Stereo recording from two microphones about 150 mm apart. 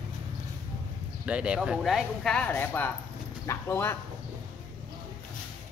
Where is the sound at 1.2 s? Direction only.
10° right (ahead or behind); by 4.0 s 15° left (ahead or behind).